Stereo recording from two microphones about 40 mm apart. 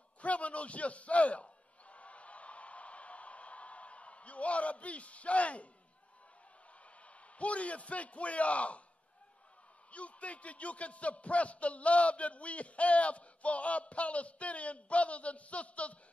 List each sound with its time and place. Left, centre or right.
0.2 s a sound: left
7.1 s a man's voice: left
9.8 s a man's voice: left